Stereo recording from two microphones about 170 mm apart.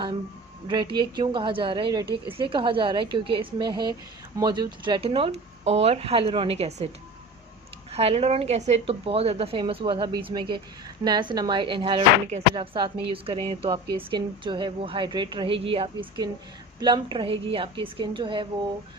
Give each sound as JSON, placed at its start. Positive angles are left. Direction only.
{"t": 0.7, "sound": "speech", "side_deg": -25}